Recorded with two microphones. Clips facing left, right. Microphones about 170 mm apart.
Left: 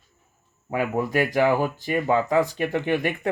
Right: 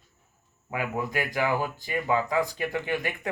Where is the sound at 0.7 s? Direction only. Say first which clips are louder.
Left 6 dB; 40° left (ahead or behind).